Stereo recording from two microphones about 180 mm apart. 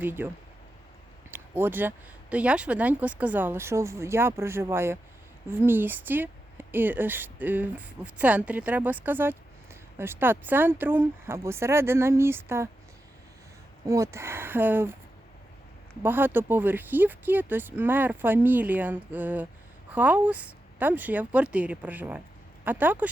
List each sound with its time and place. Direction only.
0.0 s speech: 10° right (ahead or behind)
1.3 s a sound: 10° right (ahead or behind)
2.3 s speech: 5° right (ahead or behind)
13.8 s speech: 15° right (ahead or behind)
16.0 s speech: 10° right (ahead or behind)